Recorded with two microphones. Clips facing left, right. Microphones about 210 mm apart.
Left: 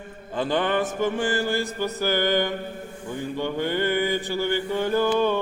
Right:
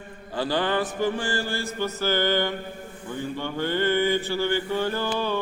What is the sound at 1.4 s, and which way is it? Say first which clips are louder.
Mantra: left 3 dB; 20° left (ahead or behind).